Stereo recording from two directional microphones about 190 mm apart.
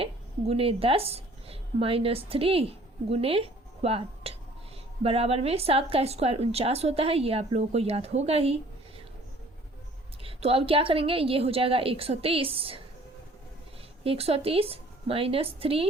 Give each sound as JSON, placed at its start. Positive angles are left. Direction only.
{"t": 0.0, "sound": "a woman's voice", "side_deg": -30}
{"t": 10.2, "sound": "a woman's voice", "side_deg": -30}
{"t": 14.0, "sound": "speech", "side_deg": -30}